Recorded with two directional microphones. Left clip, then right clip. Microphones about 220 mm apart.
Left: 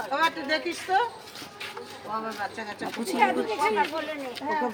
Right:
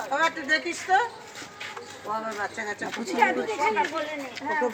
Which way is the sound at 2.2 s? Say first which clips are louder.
Right 2 dB; 5° right (ahead or behind).